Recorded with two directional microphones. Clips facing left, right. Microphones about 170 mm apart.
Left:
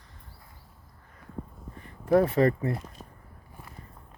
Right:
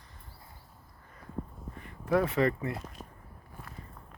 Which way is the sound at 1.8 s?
35° left (ahead or behind).